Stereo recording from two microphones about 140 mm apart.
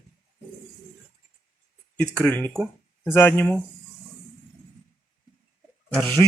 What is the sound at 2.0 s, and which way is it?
Speech, 10° left (ahead or behind).